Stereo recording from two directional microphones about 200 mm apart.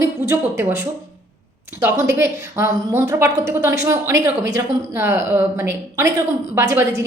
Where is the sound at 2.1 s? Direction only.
15° right (ahead or behind).